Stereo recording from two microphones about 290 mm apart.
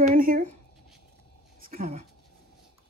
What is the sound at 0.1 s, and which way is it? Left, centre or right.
Writing, right.